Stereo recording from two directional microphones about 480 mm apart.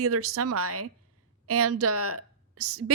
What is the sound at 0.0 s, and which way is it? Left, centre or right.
A woman's voice, right.